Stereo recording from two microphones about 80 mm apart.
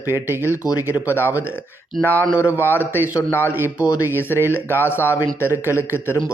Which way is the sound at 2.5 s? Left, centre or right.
Left.